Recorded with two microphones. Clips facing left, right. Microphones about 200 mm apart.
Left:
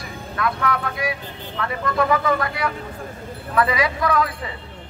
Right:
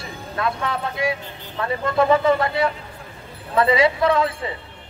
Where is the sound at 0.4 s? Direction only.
25° right (ahead or behind).